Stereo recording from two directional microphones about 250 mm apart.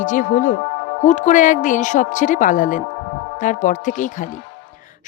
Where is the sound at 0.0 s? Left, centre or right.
Left.